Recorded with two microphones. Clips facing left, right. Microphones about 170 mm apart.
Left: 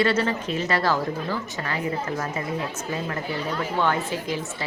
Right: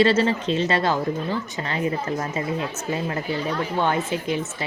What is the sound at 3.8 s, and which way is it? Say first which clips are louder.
Speech: right 1 dB; 20° right (ahead or behind).